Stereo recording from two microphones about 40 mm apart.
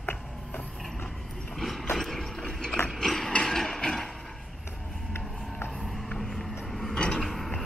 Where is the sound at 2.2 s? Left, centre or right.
Centre.